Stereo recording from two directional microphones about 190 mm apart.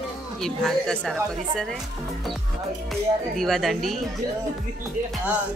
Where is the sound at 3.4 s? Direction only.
Centre (ahead or behind).